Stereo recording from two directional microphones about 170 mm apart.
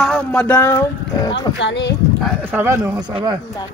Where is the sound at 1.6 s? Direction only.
90° left.